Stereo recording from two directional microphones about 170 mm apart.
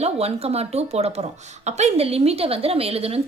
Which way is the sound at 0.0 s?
35° right (ahead or behind).